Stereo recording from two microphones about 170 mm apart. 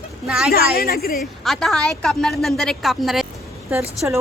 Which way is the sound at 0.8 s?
65° left (ahead or behind).